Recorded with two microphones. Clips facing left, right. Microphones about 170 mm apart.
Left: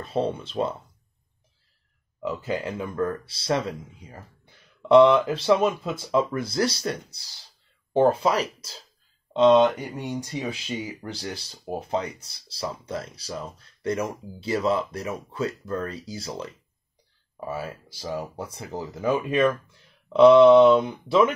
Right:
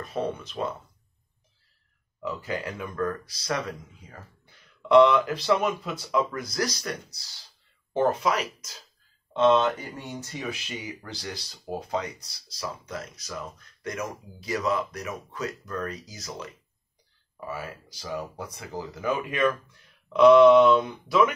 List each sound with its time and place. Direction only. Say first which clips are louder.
0.0 s speech: left 4 dB; 30° left (ahead or behind)
2.4 s speech: left 5 dB; 25° left (ahead or behind)
4.8 s speech: left 2 dB; 25° left (ahead or behind)
9.3 s speech: left 4 dB; 15° left (ahead or behind)
11.0 s speech: left 4 dB; 30° left (ahead or behind)
17.5 s speech: left 4 dB; 30° left (ahead or behind)